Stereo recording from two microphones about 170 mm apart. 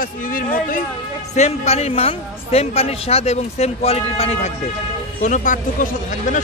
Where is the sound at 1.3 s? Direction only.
40° left (ahead or behind).